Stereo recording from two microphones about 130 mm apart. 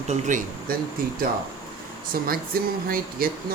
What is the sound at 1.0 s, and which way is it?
Speech, 90° right.